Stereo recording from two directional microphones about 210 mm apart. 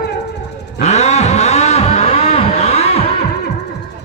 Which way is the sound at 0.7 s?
30° left (ahead or behind).